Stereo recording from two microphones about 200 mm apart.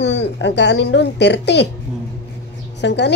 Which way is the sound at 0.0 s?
60° left (ahead or behind).